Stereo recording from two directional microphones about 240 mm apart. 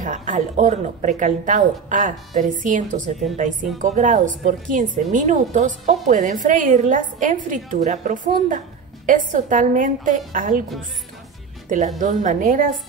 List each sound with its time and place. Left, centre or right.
0.0 s speech: right
12.0 s speech: right